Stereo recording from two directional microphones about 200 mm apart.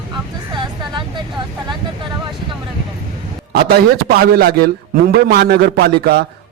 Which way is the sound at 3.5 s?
50° right (ahead or behind).